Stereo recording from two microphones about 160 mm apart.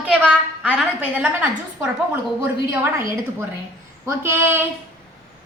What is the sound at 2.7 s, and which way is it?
Speech, 15° right (ahead or behind).